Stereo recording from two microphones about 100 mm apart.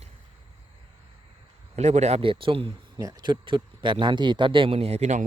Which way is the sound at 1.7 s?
80° right.